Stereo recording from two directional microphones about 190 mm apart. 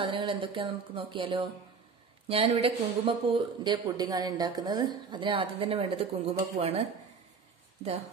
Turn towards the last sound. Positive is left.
turn(degrees=-35)  # may be behind; listen again after turning